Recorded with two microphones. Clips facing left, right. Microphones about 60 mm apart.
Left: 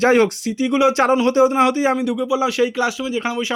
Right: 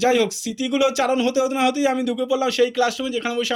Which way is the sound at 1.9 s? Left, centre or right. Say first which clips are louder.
Left 2 dB; centre.